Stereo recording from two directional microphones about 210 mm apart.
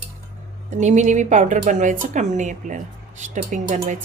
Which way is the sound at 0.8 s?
35° right (ahead or behind).